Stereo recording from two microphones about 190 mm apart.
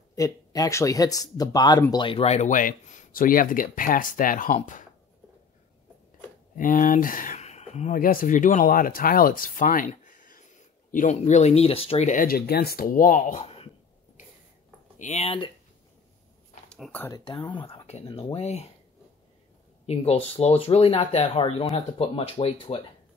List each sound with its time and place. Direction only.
0.1 s speech: 20° left (ahead or behind); by 4.8 s 40° left (ahead or behind)
6.5 s speech: 45° left (ahead or behind)
8.0 s speech: 50° left (ahead or behind)
15.0 s speech: 35° left (ahead or behind)
16.7 s speech: 5° left (ahead or behind)
17.3 s speech: 25° left (ahead or behind)
19.9 s speech: 30° left (ahead or behind)